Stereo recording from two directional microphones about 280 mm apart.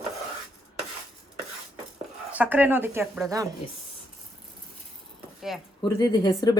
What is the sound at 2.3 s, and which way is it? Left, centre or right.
Speech, centre.